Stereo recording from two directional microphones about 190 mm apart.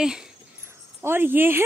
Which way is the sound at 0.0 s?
5° right (ahead or behind).